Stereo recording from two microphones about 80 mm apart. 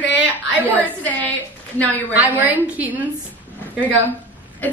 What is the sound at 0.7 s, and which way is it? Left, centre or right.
Speech, left.